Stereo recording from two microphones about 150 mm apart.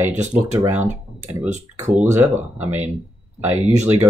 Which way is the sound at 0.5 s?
15° right (ahead or behind).